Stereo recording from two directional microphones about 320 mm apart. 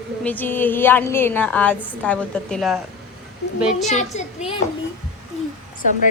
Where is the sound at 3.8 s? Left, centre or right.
Left.